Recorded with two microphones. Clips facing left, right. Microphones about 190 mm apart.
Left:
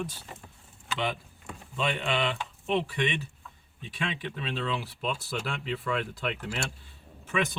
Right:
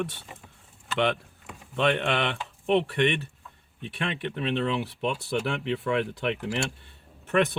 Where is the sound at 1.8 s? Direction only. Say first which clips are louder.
Right 4 dB; 65° right (ahead or behind).